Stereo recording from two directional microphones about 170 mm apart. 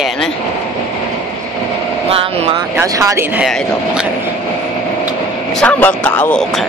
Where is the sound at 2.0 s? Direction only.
35° right (ahead or behind).